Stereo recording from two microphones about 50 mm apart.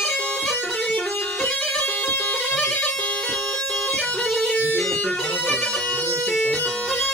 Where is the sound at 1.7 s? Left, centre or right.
Left.